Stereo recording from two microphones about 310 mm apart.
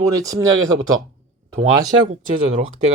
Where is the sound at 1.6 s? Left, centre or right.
Centre.